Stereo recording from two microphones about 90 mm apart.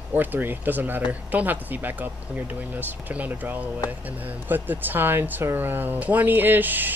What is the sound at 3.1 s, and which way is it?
Speech, 15° right (ahead or behind).